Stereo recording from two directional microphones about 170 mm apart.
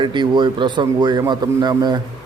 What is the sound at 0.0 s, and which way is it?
A man's voice, 25° right (ahead or behind).